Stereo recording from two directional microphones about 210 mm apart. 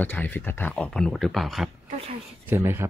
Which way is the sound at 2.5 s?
10° right (ahead or behind).